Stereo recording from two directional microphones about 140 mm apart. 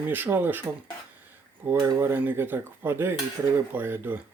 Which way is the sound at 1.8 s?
15° right (ahead or behind).